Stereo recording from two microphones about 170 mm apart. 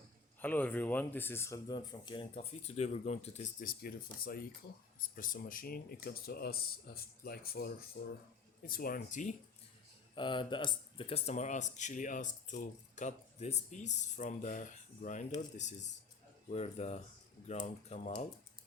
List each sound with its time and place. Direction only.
0.4 s speech: 10° left (ahead or behind); by 3.5 s 40° left (ahead or behind)
3.6 s speech: 55° left (ahead or behind)
10.2 s speech: 30° left (ahead or behind); by 18.1 s 45° left (ahead or behind)